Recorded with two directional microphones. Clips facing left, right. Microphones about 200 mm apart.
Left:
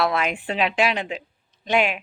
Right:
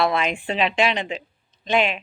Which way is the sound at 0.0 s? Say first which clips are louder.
Right 1 dB; 5° left (ahead or behind).